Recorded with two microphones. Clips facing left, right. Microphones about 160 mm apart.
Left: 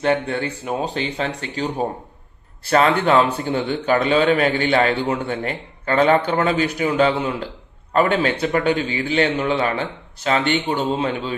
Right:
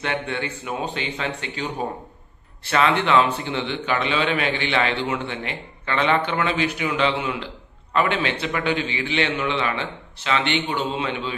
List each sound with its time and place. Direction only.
0.0 s a man's voice: 40° left (ahead or behind)